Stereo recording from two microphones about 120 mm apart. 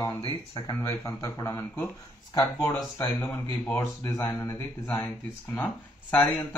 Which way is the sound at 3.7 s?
25° left (ahead or behind).